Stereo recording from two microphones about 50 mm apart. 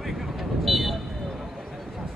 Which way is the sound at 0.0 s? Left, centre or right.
Centre.